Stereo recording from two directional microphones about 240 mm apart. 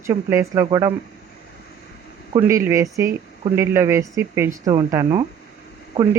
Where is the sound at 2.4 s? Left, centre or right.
Centre.